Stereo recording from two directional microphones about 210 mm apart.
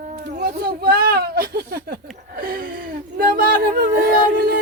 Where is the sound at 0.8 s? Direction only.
45° right (ahead or behind).